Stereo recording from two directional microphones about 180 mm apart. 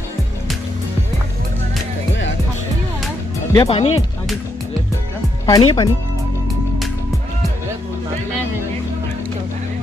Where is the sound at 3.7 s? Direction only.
35° left (ahead or behind).